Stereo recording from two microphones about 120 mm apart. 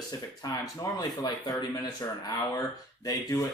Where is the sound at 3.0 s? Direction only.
30° left (ahead or behind).